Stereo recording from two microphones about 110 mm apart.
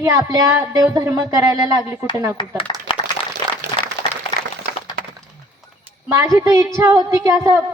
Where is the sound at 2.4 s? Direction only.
45° left (ahead or behind).